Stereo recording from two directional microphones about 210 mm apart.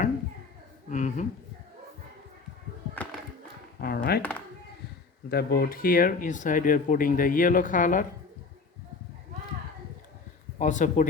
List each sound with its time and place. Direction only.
0.9 s a woman's voice: 35° left (ahead or behind)
3.8 s speech: 45° left (ahead or behind)
4.2 s speech: 10° left (ahead or behind)
5.3 s speech: 45° left (ahead or behind)
10.6 s speech: 35° left (ahead or behind)